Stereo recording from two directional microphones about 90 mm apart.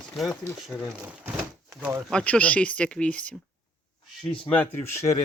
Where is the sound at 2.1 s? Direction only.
10° left (ahead or behind).